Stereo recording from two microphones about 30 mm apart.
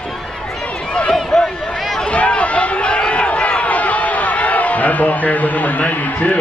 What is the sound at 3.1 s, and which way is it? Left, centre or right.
Speech, left.